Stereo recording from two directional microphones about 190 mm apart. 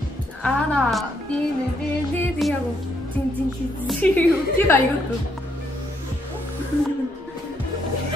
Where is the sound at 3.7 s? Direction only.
Centre (ahead or behind).